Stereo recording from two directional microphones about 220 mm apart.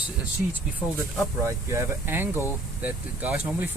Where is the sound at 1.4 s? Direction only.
10° right (ahead or behind).